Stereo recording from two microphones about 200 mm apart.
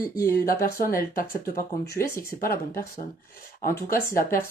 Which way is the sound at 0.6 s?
45° left (ahead or behind).